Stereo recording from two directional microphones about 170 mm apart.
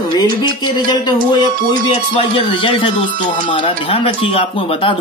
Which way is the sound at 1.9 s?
30° left (ahead or behind).